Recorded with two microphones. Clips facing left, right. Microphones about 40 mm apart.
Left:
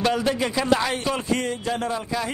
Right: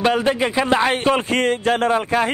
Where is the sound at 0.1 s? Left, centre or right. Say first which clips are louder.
Right 5 dB; right.